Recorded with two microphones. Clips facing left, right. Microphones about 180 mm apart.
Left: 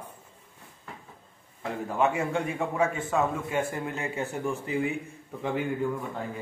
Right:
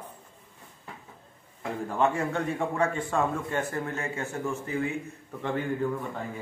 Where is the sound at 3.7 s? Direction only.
15° left (ahead or behind).